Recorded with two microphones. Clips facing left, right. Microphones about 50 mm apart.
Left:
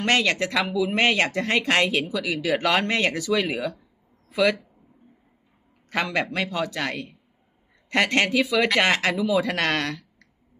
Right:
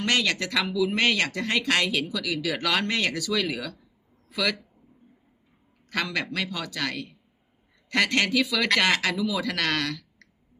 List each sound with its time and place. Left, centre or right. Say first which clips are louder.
0.0 s speech: left 3 dB; left
5.9 s speech: left 3 dB; left